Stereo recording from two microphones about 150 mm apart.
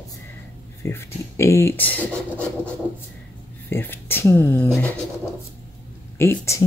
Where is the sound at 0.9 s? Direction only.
15° left (ahead or behind).